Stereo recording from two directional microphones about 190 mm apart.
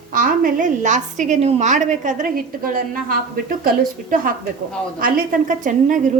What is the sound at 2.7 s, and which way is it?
A woman's voice, 50° right (ahead or behind).